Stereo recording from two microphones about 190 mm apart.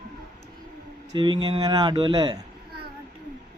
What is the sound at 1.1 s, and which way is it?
Speech, 25° right (ahead or behind).